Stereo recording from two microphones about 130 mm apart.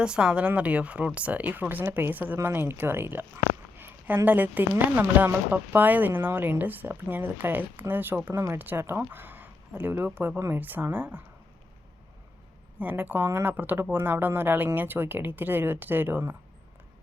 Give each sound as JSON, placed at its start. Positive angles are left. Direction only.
{"t": 0.0, "sound": "speech", "side_deg": -5}
{"t": 12.8, "sound": "speech", "side_deg": -15}